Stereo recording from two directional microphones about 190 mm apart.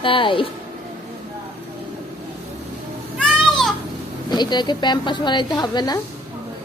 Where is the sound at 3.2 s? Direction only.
Centre (ahead or behind).